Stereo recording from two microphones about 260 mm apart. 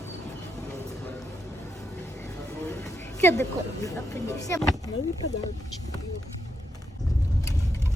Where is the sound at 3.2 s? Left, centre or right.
Centre.